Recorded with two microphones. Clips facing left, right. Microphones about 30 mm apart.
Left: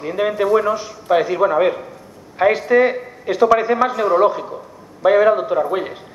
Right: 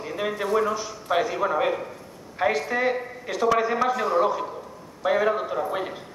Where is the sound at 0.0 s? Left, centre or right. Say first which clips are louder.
Left 9 dB; centre.